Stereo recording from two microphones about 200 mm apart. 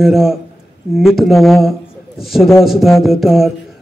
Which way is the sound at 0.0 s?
Centre (ahead or behind).